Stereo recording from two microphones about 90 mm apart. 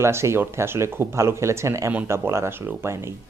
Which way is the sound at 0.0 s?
30° right (ahead or behind).